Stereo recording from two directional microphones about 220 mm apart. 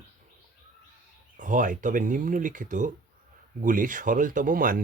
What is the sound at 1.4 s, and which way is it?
Speech, 35° right (ahead or behind).